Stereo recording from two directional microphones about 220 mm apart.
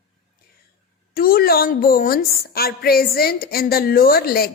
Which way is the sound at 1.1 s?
40° left (ahead or behind).